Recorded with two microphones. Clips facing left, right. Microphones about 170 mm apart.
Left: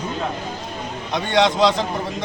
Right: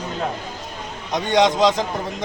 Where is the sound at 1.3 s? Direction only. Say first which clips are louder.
Even; 40° right (ahead or behind).